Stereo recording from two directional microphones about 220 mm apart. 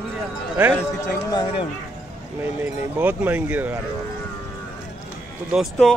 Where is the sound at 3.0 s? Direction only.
5° right (ahead or behind).